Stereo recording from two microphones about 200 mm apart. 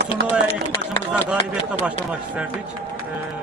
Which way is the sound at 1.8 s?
5° right (ahead or behind).